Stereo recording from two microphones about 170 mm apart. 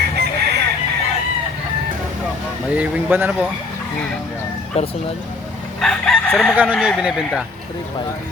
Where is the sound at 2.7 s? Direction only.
10° right (ahead or behind).